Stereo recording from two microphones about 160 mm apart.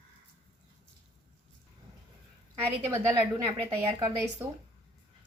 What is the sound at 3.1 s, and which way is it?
A woman's voice, 30° right (ahead or behind).